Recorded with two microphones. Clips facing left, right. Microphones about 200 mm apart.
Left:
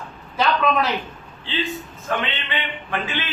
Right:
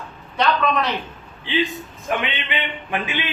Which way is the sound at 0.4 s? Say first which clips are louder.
Even; centre (ahead or behind).